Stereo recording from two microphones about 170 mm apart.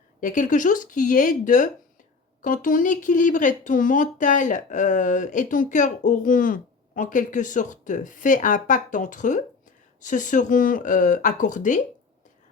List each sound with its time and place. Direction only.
0.2 s speech: 50° left (ahead or behind)